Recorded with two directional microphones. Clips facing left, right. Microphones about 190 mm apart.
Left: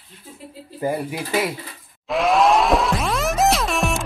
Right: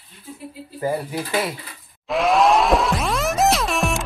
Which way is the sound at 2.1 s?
Centre (ahead or behind).